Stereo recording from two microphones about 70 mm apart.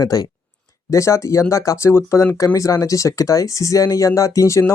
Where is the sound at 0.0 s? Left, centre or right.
Left.